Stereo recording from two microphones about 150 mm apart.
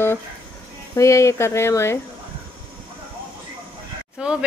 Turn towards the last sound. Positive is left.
turn(degrees=-5)  # may be behind; listen again after turning